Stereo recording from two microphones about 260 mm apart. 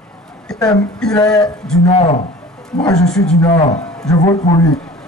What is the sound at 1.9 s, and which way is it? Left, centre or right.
Speech, left.